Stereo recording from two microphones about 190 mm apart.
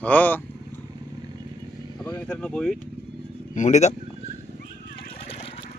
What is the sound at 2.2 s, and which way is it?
Speech, 5° left (ahead or behind).